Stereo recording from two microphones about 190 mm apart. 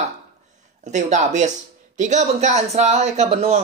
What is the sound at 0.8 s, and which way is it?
Speech, 40° right (ahead or behind).